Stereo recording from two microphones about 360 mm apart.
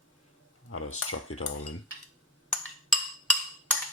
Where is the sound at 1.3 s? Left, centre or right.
Left.